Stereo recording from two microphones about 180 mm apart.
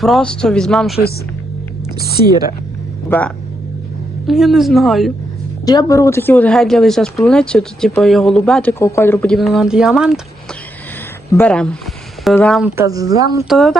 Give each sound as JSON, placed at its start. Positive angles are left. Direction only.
{"t": 0.0, "sound": "speech", "side_deg": 0}
{"t": 2.0, "sound": "speech", "side_deg": 60}
{"t": 3.1, "sound": "speech", "side_deg": 10}
{"t": 5.6, "sound": "speech", "side_deg": 20}
{"t": 11.3, "sound": "speech", "side_deg": 10}
{"t": 12.6, "sound": "speech", "side_deg": -15}
{"t": 13.5, "sound": "speech", "side_deg": 0}